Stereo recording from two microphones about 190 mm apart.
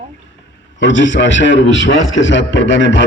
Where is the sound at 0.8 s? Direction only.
80° left.